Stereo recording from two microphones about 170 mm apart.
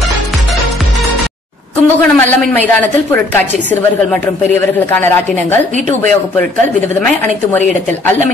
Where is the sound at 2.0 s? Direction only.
10° left (ahead or behind).